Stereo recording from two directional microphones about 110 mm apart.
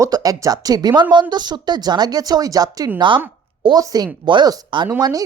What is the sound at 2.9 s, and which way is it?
Speech, 50° right (ahead or behind).